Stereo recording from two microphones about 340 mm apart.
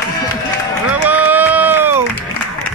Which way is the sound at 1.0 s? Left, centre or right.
Centre.